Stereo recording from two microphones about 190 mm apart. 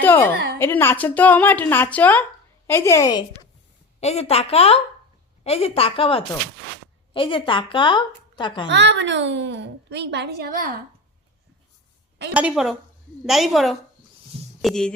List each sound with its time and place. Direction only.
0.0 s a woman's voice: 10° left (ahead or behind)
4.0 s a woman's voice: 35° left (ahead or behind)
8.7 s a child's voice: 70° right (ahead or behind); by 10.7 s 50° right (ahead or behind)
12.3 s a woman's voice: 5° right (ahead or behind)